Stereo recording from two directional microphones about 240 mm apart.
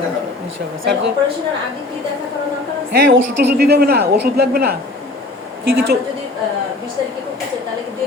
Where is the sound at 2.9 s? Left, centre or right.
Right.